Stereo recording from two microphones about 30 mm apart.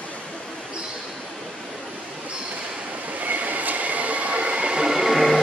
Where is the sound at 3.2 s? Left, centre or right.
Right.